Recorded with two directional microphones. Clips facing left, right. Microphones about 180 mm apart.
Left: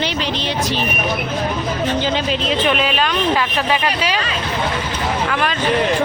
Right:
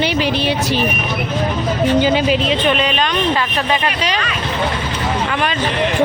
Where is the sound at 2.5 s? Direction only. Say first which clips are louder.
Right 1 dB; 5° left (ahead or behind).